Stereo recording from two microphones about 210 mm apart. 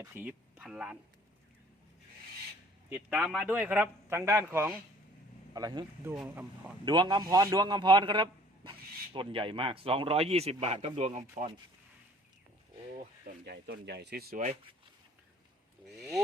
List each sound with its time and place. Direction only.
0.0 s speech: 10° right (ahead or behind)
2.9 s a man's voice: 5° right (ahead or behind); by 11.5 s 35° right (ahead or behind)
13.2 s speech: 50° right (ahead or behind)
14.4 s speech: 25° right (ahead or behind)